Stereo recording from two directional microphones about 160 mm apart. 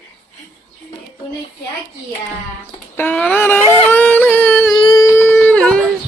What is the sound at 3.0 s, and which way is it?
Yodeling, 10° left (ahead or behind).